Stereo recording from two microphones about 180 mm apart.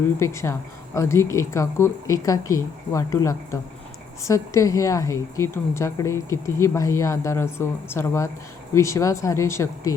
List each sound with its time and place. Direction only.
0.2 s a woman's voice: 15° left (ahead or behind)